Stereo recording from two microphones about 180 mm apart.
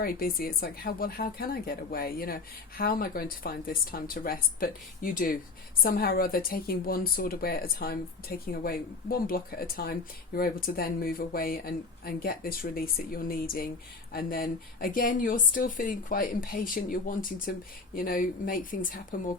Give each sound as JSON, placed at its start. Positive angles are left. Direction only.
{"t": 0.0, "sound": "speech", "side_deg": 55}